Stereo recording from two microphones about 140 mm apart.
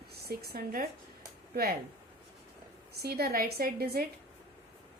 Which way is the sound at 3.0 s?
90° right.